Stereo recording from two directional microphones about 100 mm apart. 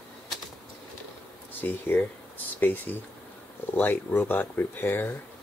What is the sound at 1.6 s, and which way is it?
Speech, 20° left (ahead or behind).